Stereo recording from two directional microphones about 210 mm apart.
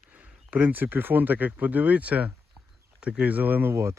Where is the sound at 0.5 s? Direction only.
10° right (ahead or behind).